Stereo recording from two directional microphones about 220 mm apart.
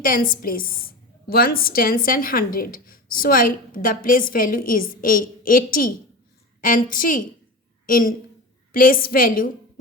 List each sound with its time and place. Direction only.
0.0 s a woman's voice: 40° left (ahead or behind)